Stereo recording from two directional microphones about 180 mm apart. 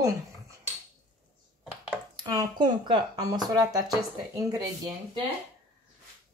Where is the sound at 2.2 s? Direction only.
20° right (ahead or behind).